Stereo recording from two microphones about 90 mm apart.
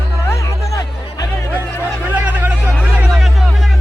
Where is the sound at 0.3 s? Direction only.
35° left (ahead or behind).